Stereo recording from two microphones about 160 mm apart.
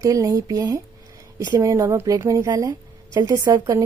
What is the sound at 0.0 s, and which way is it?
Speech, 20° right (ahead or behind).